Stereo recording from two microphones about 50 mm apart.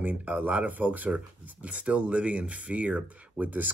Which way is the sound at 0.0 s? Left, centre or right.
Right.